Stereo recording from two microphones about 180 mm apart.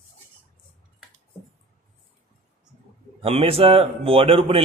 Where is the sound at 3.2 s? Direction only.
30° right (ahead or behind).